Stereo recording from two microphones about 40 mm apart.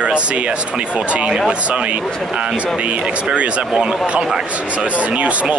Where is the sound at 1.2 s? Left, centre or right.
Centre.